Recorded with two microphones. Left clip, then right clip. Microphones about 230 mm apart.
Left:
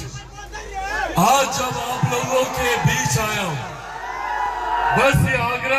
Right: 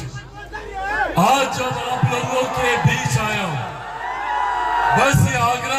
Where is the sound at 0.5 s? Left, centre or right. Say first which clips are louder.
Right 3 dB; right.